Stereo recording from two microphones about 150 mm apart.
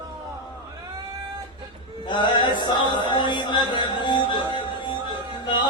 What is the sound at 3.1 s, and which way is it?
Music, 30° left (ahead or behind).